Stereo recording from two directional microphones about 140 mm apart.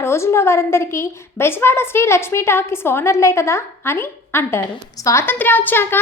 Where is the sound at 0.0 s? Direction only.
20° left (ahead or behind).